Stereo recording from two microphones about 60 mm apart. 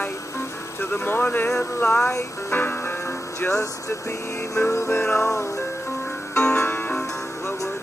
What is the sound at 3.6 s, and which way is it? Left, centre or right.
Music, left.